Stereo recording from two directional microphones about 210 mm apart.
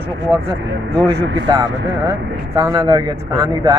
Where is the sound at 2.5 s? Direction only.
15° right (ahead or behind).